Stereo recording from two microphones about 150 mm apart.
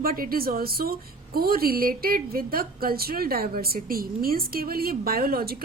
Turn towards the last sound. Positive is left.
turn(degrees=-90)